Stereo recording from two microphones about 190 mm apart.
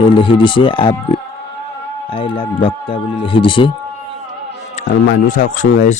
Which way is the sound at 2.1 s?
30° left (ahead or behind).